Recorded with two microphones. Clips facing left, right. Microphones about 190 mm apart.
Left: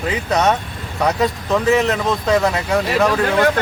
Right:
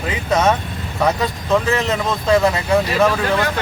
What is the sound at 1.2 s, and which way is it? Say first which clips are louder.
Speech: left 1 dB; centre (ahead or behind).